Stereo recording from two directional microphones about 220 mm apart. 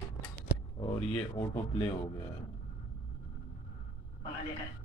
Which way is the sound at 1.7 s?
10° left (ahead or behind).